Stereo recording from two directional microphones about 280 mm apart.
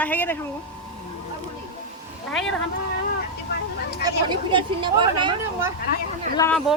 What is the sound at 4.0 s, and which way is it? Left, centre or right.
Speech, centre.